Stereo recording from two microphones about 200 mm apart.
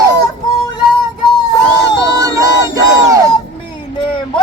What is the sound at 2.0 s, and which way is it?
Battle cry, 15° right (ahead or behind).